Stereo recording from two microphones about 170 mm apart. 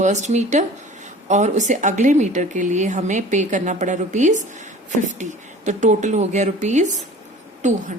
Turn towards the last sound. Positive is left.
turn(degrees=-45)  # may be behind; listen again after turning